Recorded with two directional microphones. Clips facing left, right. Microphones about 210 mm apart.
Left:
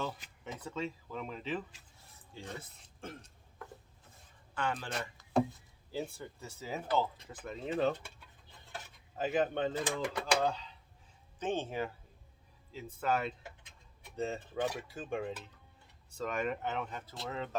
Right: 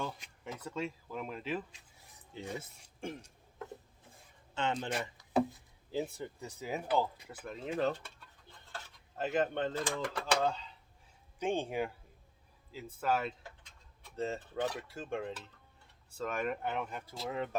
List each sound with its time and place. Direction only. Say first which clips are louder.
0.1 s speech: even; centre (ahead or behind)
4.5 s speech: right 2 dB; 25° right (ahead or behind)
5.9 s speech: right 3 dB; 20° right (ahead or behind)
7.4 s a sound: left 1 dB; centre (ahead or behind)
9.1 s speech: left 1 dB; centre (ahead or behind)
11.3 s speech: right 2 dB; 10° right (ahead or behind)
13.0 s speech: even; 5° right (ahead or behind)